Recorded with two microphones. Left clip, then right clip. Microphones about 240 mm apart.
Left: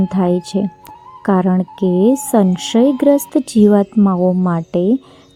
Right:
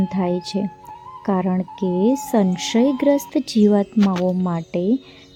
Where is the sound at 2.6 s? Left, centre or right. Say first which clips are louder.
Left 5 dB; centre.